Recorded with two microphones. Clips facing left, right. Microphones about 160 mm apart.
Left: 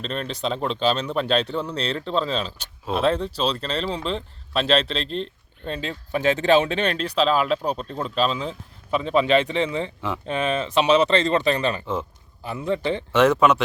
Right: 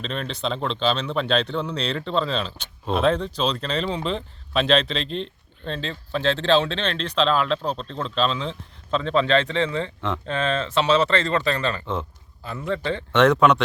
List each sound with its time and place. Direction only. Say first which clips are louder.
0.0 s speech: left 1 dB; centre (ahead or behind); by 13.1 s 15° left (ahead or behind)
13.1 s speech: right 1 dB; 5° left (ahead or behind)